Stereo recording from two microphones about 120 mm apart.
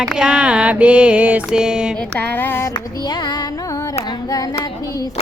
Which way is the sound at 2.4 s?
15° left (ahead or behind).